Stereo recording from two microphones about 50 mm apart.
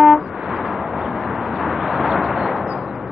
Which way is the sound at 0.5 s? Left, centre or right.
Centre.